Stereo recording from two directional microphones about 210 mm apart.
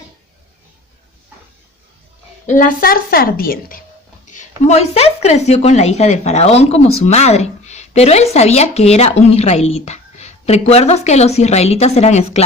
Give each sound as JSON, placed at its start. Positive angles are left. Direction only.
{"t": 2.5, "sound": "a woman's voice", "side_deg": 40}